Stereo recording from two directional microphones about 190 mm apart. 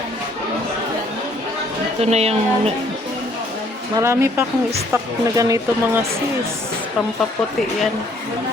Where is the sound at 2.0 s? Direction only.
35° right (ahead or behind).